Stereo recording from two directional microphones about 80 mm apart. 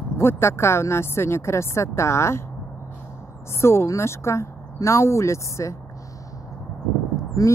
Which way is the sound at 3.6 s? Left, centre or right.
Left.